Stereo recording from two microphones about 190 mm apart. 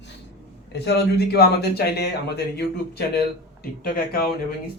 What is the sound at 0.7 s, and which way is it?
Speech, 60° left (ahead or behind).